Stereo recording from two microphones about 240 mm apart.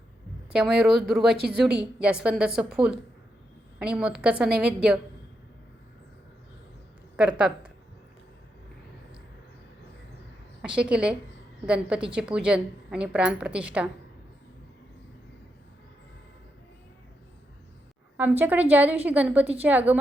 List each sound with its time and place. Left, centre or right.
0.5 s a woman's voice: centre
3.8 s a woman's voice: centre
7.2 s a woman's voice: centre
10.6 s a woman's voice: centre
18.2 s a woman's voice: centre